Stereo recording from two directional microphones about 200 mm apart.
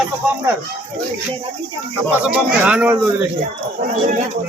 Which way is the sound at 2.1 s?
5° right (ahead or behind).